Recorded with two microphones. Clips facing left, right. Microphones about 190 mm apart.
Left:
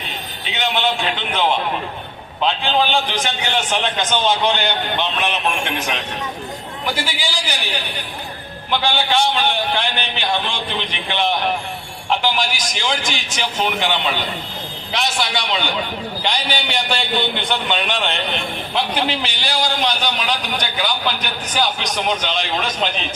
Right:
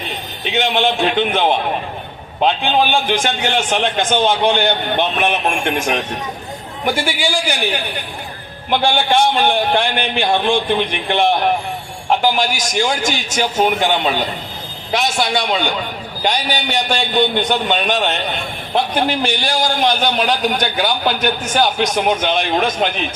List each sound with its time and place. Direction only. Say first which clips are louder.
0.5 s a man's voice: right 4 dB; 50° right (ahead or behind)
8.7 s a man's voice: right 4 dB; 50° right (ahead or behind)